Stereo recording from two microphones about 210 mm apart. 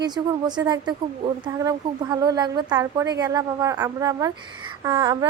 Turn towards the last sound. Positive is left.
turn(degrees=-15)  # may be behind; listen again after turning